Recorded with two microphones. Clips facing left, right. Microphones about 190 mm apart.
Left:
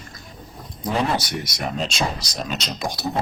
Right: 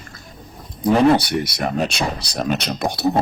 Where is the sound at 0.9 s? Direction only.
60° right (ahead or behind).